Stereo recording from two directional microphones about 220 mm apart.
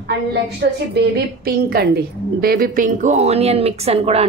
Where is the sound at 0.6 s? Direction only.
50° right (ahead or behind).